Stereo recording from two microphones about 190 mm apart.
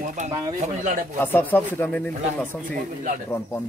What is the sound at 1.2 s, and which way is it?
Speech, 10° left (ahead or behind).